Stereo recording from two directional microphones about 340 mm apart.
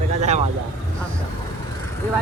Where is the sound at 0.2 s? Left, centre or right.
Centre.